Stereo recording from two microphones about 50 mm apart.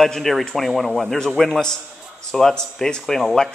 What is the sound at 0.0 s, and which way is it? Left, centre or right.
Speech, centre.